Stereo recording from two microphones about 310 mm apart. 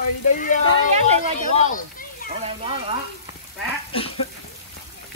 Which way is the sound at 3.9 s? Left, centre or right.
Centre.